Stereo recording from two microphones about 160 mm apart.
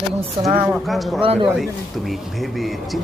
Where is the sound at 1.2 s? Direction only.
35° right (ahead or behind).